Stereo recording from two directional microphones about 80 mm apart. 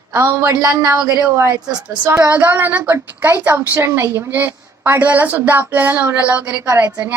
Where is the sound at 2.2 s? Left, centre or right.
Right.